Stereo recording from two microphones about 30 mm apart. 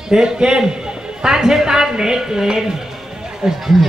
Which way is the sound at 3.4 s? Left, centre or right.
Right.